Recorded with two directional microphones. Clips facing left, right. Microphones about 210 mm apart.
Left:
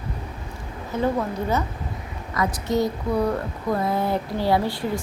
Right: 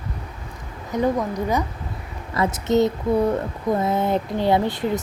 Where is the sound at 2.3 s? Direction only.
25° right (ahead or behind).